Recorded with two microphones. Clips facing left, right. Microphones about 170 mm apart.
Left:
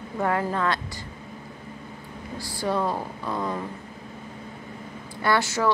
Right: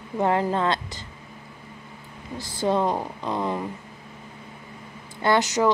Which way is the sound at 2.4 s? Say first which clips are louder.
Right 3 dB; 20° right (ahead or behind).